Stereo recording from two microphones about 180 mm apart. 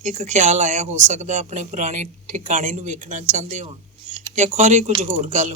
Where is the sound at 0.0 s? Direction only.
40° right (ahead or behind).